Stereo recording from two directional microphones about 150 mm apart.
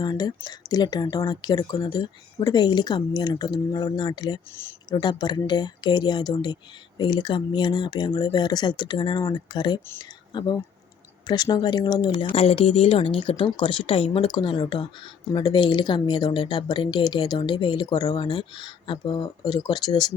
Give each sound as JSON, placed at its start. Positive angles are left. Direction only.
{"t": 0.0, "sound": "speech", "side_deg": 25}